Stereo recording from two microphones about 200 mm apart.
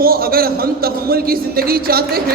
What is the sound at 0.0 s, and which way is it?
A man's voice, 50° right (ahead or behind).